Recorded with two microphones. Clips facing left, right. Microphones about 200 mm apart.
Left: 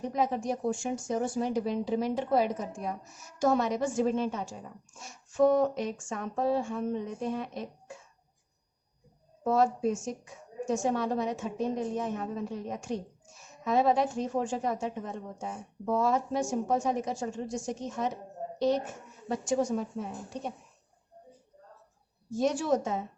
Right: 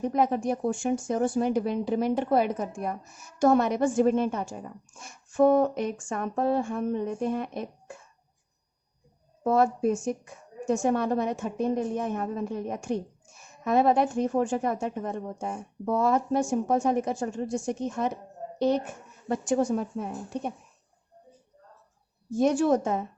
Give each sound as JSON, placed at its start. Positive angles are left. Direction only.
{"t": 0.0, "sound": "a woman's voice", "side_deg": -55}
{"t": 9.4, "sound": "a woman's voice", "side_deg": -55}
{"t": 22.3, "sound": "a woman's voice", "side_deg": -55}